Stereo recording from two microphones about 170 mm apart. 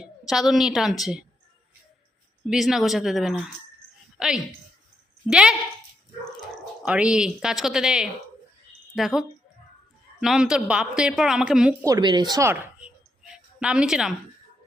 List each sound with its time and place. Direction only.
0.0 s a woman's voice: centre (ahead or behind)
2.5 s a woman's voice: centre (ahead or behind)
6.8 s a woman's voice: 5° right (ahead or behind)
11.9 s speech: 25° right (ahead or behind)
13.2 s a sound: 5° right (ahead or behind)